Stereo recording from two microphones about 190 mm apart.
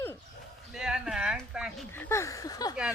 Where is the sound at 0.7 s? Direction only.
5° right (ahead or behind).